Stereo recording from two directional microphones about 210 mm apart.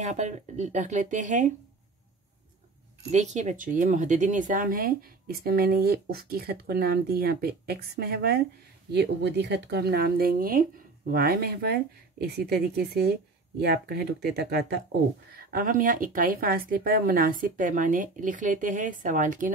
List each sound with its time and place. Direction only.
0.0 s a woman's voice: 35° right (ahead or behind)
3.1 s a woman's voice: 35° right (ahead or behind)